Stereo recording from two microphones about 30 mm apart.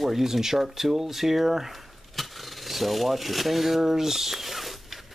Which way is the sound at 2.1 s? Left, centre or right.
Centre.